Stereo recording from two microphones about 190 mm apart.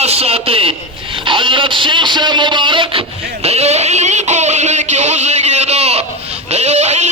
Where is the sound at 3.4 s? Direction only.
35° right (ahead or behind).